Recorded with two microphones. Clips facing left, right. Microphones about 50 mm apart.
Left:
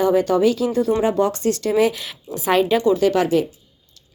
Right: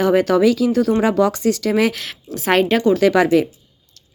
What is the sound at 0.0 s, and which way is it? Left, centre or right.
Speech, right.